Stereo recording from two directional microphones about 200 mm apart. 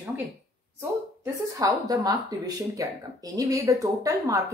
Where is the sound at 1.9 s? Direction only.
20° right (ahead or behind).